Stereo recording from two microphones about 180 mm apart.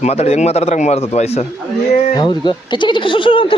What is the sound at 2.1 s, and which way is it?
Speech, 25° left (ahead or behind).